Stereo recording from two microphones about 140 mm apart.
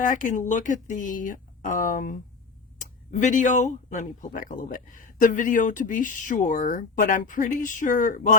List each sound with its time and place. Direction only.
0.0 s speech: 65° left (ahead or behind)